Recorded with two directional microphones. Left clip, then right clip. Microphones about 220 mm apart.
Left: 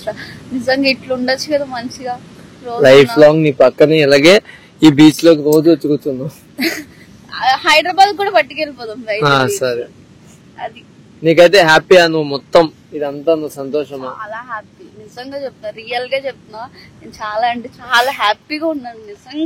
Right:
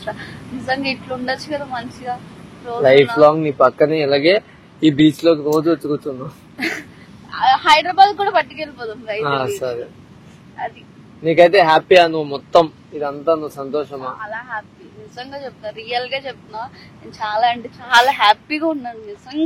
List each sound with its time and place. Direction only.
0.0 s a woman's voice: 50° left (ahead or behind)